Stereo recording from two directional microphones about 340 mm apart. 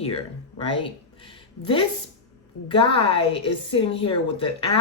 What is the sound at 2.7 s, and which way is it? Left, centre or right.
A woman's voice, centre.